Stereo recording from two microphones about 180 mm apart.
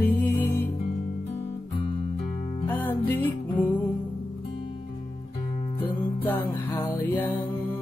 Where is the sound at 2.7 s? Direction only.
10° left (ahead or behind).